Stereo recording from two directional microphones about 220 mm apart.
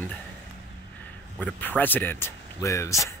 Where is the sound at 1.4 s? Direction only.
5° left (ahead or behind).